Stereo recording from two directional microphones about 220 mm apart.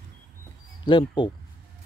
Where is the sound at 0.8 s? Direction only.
20° left (ahead or behind).